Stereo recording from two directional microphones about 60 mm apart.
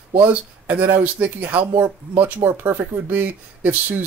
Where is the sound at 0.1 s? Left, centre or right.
Right.